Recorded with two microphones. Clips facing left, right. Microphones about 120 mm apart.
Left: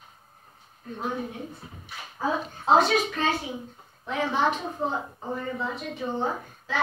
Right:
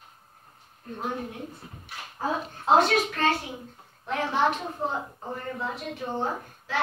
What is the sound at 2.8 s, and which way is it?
A woman's voice, 55° right (ahead or behind).